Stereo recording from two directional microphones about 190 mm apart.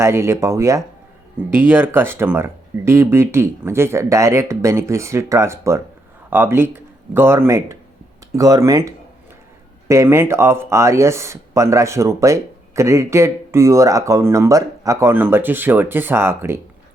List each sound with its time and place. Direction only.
0.0 s a man's voice: 15° right (ahead or behind)
9.9 s speech: 15° right (ahead or behind)